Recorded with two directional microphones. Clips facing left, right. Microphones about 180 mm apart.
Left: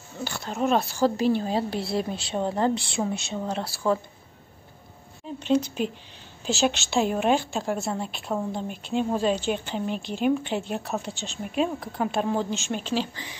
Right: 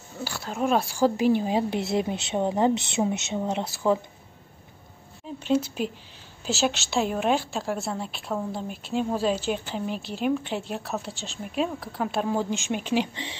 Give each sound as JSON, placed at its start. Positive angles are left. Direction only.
{"t": 0.2, "sound": "a woman's voice", "side_deg": -5}
{"t": 5.4, "sound": "a woman's voice", "side_deg": -5}